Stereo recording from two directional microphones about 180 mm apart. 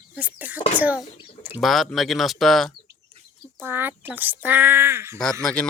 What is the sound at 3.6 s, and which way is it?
Speech, 10° right (ahead or behind).